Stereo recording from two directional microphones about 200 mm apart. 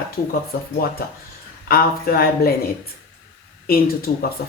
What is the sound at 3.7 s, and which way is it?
Speech, 50° left (ahead or behind).